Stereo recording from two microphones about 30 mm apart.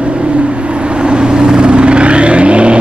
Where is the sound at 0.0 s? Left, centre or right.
Right.